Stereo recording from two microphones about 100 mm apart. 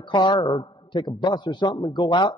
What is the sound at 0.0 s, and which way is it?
A man's voice, 50° left (ahead or behind).